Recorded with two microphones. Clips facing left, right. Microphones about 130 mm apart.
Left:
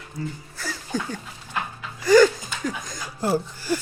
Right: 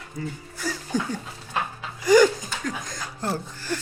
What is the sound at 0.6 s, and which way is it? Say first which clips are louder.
Music: right 2 dB; 15° right (ahead or behind).